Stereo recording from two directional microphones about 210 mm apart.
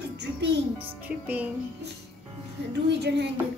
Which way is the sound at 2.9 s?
55° right (ahead or behind).